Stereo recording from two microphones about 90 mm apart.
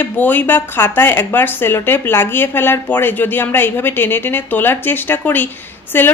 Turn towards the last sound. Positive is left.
turn(degrees=25)  # may be behind; listen again after turning